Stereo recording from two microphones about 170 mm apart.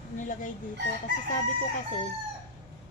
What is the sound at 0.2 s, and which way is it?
Speech, 50° left (ahead or behind).